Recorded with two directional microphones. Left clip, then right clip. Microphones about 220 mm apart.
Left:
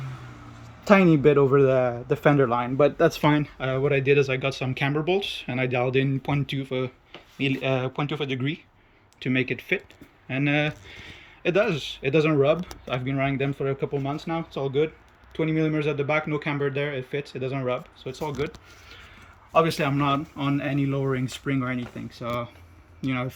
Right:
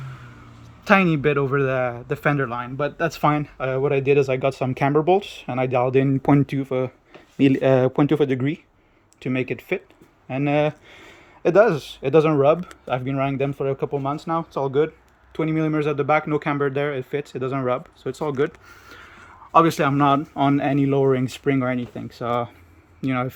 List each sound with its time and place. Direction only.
0.9 s speech: 5° right (ahead or behind)
6.2 s speech: 25° right (ahead or behind)
7.7 s speech: 35° right (ahead or behind)
8.4 s speech: 15° right (ahead or behind)
19.5 s speech: 15° right (ahead or behind)